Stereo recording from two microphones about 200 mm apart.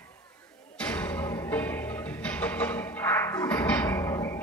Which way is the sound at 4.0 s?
15° left (ahead or behind).